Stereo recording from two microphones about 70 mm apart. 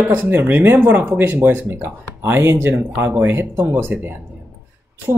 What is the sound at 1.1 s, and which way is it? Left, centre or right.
Speech, right.